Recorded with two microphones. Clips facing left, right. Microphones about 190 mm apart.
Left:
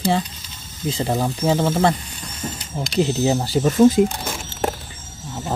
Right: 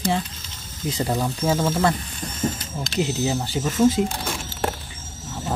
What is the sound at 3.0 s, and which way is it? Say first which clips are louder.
Speech: left 5 dB; 35° left (ahead or behind).